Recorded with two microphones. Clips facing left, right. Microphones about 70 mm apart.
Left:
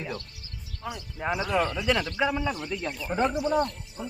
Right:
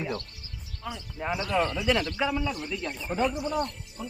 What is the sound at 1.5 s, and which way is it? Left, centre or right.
Speech, centre.